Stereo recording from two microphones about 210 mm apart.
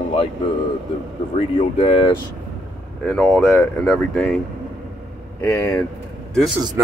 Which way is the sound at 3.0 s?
5° left (ahead or behind).